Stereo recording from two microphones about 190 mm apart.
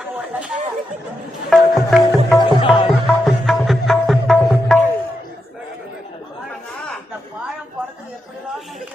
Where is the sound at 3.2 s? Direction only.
Centre (ahead or behind).